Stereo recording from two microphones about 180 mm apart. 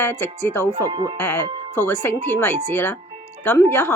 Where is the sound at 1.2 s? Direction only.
15° left (ahead or behind).